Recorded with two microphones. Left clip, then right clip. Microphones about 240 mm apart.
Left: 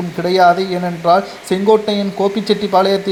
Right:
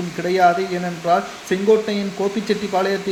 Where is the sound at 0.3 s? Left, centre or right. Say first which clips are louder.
Left 5 dB; left.